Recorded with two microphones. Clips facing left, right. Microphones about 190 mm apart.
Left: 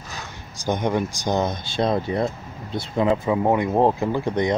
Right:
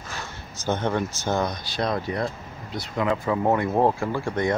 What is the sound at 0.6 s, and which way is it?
Speech, 15° left (ahead or behind).